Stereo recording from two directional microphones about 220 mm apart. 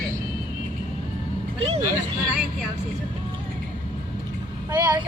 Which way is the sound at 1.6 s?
25° right (ahead or behind).